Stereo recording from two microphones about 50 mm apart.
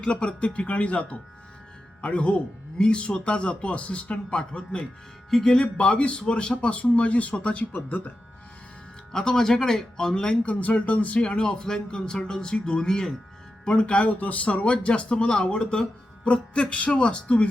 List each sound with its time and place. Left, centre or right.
0.0 s speech: centre
5.3 s speech: centre
5.5 s speech: left
9.1 s speech: centre
10.4 s speech: left; by 13.1 s centre
13.7 s speech: left